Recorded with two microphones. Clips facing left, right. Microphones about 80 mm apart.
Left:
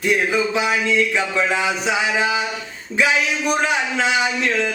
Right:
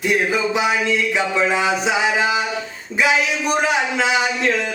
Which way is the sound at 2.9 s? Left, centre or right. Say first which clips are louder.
Right 1 dB; centre.